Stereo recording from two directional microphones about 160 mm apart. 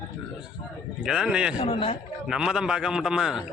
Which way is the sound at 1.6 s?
35° left (ahead or behind).